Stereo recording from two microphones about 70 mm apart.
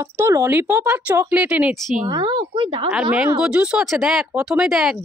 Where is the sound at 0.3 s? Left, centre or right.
Right.